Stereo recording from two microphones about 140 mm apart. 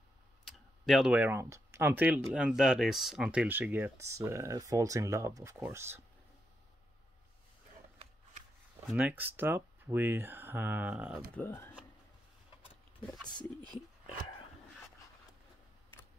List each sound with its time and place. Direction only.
0.5 s clicking: centre (ahead or behind)
1.1 s speech: 15° right (ahead or behind)
8.8 s speech: 10° right (ahead or behind)
11.3 s speech: 15° left (ahead or behind)